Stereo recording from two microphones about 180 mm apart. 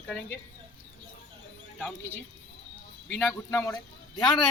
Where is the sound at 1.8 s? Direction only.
10° left (ahead or behind).